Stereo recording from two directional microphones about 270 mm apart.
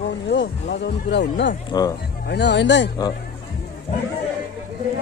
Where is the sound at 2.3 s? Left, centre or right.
Left.